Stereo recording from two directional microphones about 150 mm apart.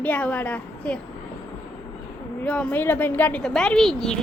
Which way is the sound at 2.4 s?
5° left (ahead or behind).